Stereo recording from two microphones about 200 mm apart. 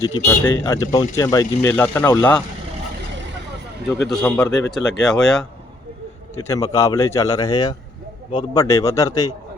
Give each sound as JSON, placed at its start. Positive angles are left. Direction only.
{"t": 0.3, "sound": "speech", "side_deg": 15}
{"t": 3.9, "sound": "speech", "side_deg": 0}
{"t": 6.3, "sound": "speech", "side_deg": 15}